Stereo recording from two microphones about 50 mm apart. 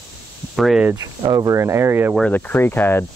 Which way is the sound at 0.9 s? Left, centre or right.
Right.